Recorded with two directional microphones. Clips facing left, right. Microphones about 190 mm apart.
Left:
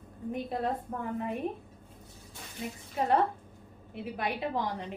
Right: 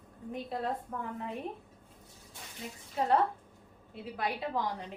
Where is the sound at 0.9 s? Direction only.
35° left (ahead or behind).